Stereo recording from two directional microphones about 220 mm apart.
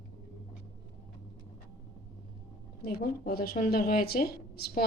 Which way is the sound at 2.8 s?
45° left (ahead or behind).